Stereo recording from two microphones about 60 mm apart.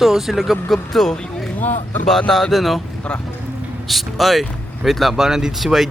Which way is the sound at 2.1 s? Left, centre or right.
Centre.